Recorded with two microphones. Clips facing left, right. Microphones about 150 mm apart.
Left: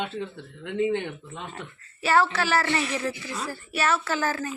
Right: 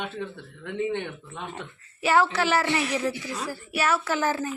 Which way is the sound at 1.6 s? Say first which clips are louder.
Right 1 dB; 15° right (ahead or behind).